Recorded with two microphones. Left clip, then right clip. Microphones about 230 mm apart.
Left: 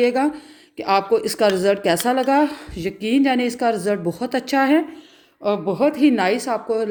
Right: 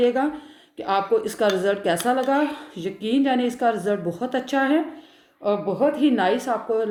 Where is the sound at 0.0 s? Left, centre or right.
Left.